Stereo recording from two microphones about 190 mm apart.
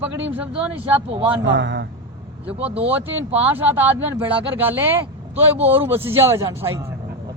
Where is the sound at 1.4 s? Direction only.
75° right (ahead or behind).